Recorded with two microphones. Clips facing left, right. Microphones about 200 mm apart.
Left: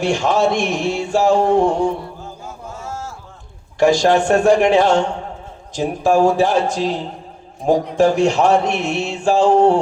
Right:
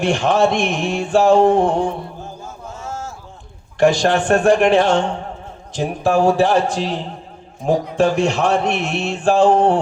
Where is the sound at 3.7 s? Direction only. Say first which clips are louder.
Left 1 dB; 55° right (ahead or behind).